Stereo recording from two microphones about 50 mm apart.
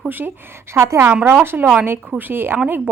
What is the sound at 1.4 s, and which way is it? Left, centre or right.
A woman's voice, right.